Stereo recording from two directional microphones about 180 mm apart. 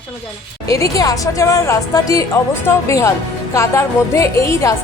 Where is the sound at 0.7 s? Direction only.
20° left (ahead or behind).